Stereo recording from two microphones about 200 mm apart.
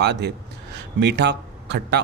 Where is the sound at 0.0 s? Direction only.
55° right (ahead or behind).